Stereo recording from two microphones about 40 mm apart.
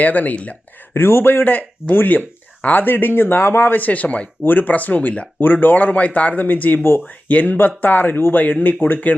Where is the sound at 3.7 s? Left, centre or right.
Left.